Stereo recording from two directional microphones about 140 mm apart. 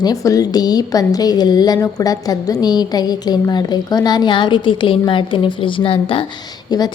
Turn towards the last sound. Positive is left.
turn(degrees=30)  # may be behind; listen again after turning